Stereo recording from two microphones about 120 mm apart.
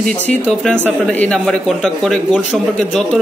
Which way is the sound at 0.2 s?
10° left (ahead or behind).